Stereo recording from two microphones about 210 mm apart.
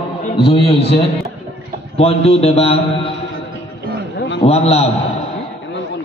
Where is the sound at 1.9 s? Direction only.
30° left (ahead or behind).